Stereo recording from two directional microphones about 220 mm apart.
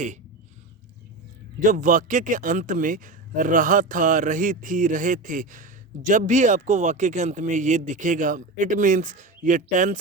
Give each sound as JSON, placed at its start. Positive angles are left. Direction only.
{"t": 1.6, "sound": "a man's voice", "side_deg": -35}